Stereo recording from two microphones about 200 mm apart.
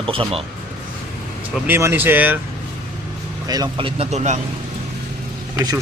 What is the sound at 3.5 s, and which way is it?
Speech, 20° right (ahead or behind).